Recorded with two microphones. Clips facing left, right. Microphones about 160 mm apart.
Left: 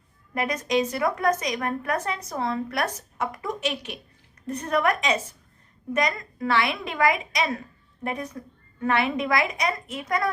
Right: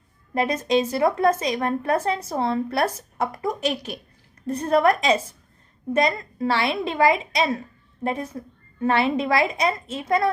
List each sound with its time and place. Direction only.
0.3 s a woman's voice: 30° right (ahead or behind)